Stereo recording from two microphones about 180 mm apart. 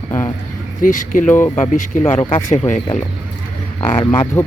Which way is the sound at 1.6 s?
45° left (ahead or behind).